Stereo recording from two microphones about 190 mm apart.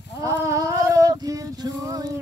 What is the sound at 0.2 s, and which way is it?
Female singing, 15° right (ahead or behind).